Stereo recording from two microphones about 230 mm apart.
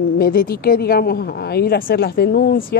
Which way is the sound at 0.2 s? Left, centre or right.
Left.